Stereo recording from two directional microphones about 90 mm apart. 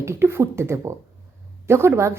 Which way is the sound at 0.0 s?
30° right (ahead or behind).